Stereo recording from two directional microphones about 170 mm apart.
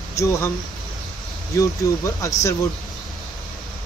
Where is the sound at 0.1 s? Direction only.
15° left (ahead or behind).